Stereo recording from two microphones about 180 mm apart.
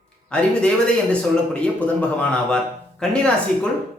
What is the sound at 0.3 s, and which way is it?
A man's voice, 5° left (ahead or behind).